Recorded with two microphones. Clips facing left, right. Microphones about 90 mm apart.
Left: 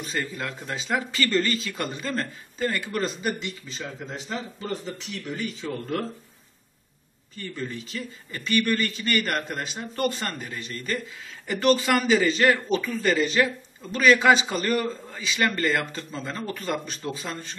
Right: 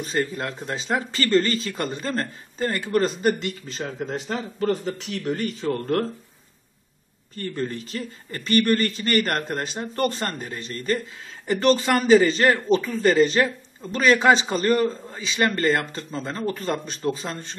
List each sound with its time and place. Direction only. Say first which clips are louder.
0.0 s a man's voice: right 5 dB; 35° right (ahead or behind)
3.2 s speech: right 7 dB; 50° right (ahead or behind)
4.3 s speech: right 7 dB; 60° right (ahead or behind)
7.3 s a man's voice: right 5 dB; 45° right (ahead or behind)